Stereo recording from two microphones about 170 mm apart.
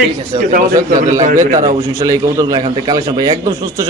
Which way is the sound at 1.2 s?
50° right (ahead or behind).